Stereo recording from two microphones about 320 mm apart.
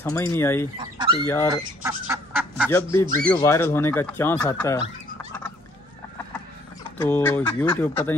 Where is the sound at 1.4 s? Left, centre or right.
Centre.